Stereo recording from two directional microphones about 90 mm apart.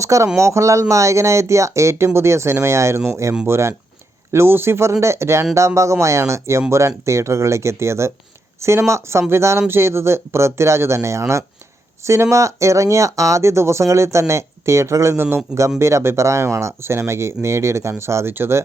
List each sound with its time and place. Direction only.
0.0 s speech: 35° right (ahead or behind)